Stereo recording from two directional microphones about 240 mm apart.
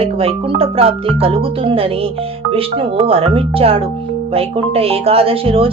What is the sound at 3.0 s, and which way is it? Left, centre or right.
Speech, right.